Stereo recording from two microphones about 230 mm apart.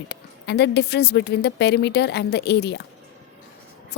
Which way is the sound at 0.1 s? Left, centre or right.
Left.